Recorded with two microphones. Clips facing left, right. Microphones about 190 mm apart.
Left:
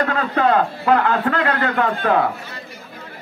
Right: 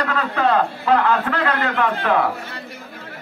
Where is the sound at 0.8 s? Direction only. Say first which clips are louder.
Left 1 dB; 45° left (ahead or behind).